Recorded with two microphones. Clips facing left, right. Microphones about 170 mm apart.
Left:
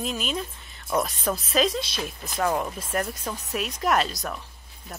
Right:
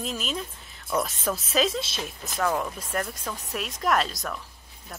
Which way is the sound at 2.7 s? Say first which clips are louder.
Left 2 dB; 5° left (ahead or behind).